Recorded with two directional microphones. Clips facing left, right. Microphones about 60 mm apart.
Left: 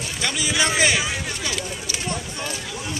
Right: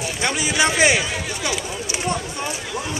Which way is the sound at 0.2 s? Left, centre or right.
Right.